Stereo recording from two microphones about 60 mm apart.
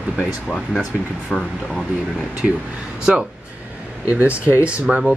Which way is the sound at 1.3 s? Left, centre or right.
Centre.